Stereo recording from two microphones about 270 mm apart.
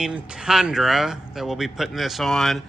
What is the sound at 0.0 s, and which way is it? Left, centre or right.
Speech, centre.